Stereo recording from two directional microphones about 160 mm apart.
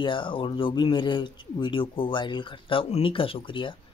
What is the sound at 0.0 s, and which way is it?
Speech, 30° left (ahead or behind).